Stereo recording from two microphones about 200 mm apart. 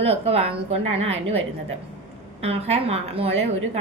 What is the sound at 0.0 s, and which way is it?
A woman's voice, 30° right (ahead or behind).